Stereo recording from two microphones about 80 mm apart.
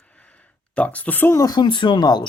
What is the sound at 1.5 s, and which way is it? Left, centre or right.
Speech, left.